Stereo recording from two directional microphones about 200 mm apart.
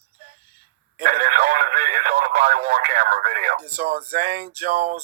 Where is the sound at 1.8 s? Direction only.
55° right (ahead or behind).